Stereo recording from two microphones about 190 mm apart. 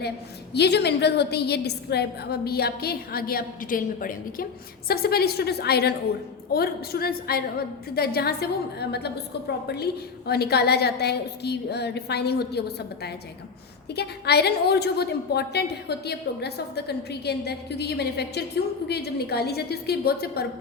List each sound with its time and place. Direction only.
0.5 s a woman's voice: 60° left (ahead or behind)